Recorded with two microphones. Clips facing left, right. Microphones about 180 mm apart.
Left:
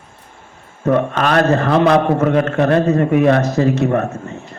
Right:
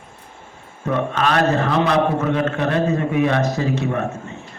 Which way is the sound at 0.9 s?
50° left (ahead or behind).